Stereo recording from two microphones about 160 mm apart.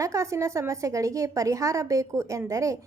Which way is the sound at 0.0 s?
20° right (ahead or behind).